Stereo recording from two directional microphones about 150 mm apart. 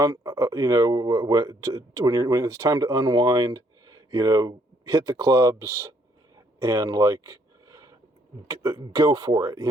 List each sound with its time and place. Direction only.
0.0 s speech: 25° right (ahead or behind)
6.6 s a sound: 20° right (ahead or behind)
8.4 s speech: 20° right (ahead or behind)